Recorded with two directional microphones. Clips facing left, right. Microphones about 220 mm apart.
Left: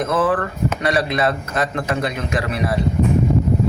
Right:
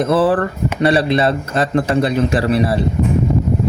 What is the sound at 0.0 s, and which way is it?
Speech, 35° right (ahead or behind).